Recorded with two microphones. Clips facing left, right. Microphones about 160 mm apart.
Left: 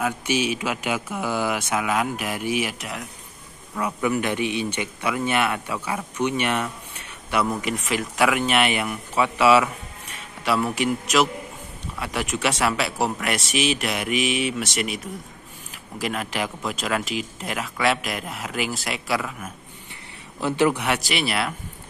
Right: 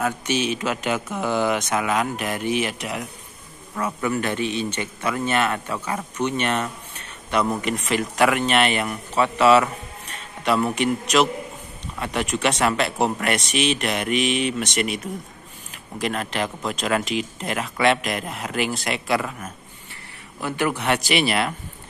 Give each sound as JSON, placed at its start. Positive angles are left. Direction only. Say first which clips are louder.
{"t": 0.0, "sound": "speech", "louder": "even", "side_deg": 10}
{"t": 3.7, "sound": "a man's voice", "louder": "left 1 dB", "side_deg": 15}
{"t": 16.0, "sound": "speech", "louder": "right 2 dB", "side_deg": 5}
{"t": 20.4, "sound": "a man's voice", "louder": "left 4 dB", "side_deg": 25}
{"t": 20.7, "sound": "speech", "louder": "right 3 dB", "side_deg": 10}